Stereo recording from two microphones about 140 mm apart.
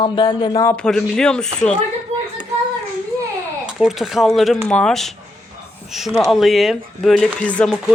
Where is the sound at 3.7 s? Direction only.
Centre (ahead or behind).